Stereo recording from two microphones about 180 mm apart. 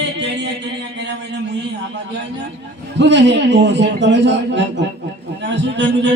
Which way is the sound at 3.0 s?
80° right.